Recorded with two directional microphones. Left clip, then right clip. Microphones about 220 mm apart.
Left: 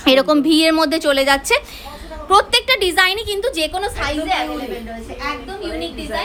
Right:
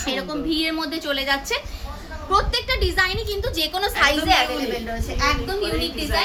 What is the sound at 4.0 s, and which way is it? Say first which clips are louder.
Speech: right 5 dB; centre (ahead or behind).